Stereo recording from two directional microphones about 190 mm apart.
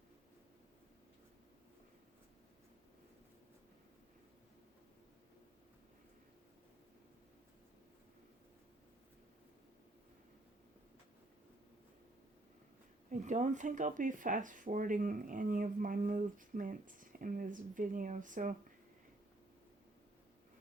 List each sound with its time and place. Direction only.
13.1 s speech: 40° right (ahead or behind)